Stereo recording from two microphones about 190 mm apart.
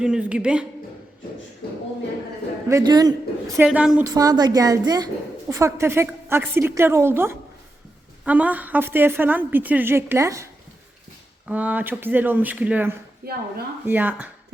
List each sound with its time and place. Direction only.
0.0 s a woman's voice: 5° right (ahead or behind)
1.6 s speech: 55° left (ahead or behind)
2.6 s a woman's voice: 20° right (ahead or behind)
3.7 s a woman's voice: 5° right (ahead or behind)
4.0 s a woman's voice: 20° right (ahead or behind)
13.2 s a woman's voice: 55° right (ahead or behind)
13.8 s a woman's voice: 10° right (ahead or behind)